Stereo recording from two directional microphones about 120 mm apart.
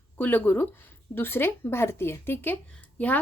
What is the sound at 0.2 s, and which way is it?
A woman's voice, 15° left (ahead or behind).